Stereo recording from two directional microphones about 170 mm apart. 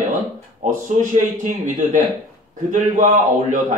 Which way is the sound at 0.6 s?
50° right (ahead or behind).